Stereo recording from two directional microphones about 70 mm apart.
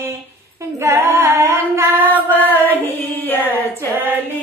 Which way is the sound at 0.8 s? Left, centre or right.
Right.